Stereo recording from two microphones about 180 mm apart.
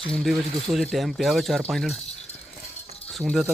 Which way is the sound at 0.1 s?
Centre (ahead or behind).